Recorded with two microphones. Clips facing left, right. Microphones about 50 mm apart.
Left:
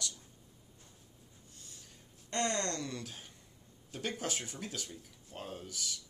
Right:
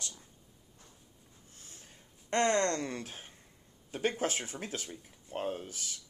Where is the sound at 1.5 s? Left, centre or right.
Right.